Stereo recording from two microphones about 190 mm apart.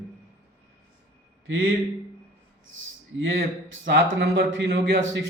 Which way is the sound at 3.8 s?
80° right.